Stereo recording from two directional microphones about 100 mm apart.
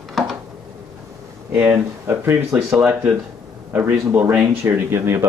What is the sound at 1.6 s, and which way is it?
Speech, 20° right (ahead or behind).